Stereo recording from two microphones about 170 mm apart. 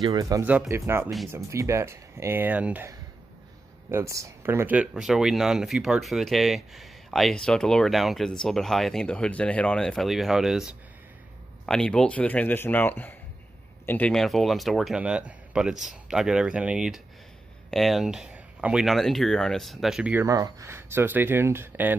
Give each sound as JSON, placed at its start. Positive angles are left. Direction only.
{"t": 0.0, "sound": "a man's voice", "side_deg": -20}
{"t": 20.2, "sound": "speech", "side_deg": -20}